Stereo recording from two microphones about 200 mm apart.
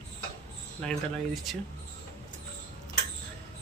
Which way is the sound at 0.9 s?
Centre (ahead or behind).